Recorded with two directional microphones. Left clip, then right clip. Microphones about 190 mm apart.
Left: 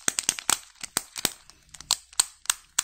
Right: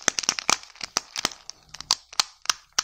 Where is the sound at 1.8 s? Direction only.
30° right (ahead or behind).